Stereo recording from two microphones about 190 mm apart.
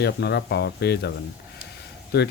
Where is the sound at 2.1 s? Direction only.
60° left (ahead or behind).